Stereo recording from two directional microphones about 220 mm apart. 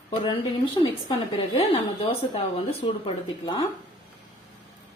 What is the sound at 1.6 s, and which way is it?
Speech, 25° left (ahead or behind).